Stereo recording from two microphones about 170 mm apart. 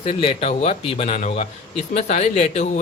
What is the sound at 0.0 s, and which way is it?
Speech, 35° left (ahead or behind).